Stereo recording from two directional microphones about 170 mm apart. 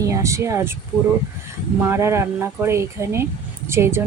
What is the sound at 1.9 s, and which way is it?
Speech, 15° right (ahead or behind).